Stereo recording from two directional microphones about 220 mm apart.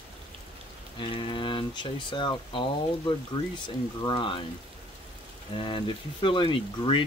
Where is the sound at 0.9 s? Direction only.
25° left (ahead or behind).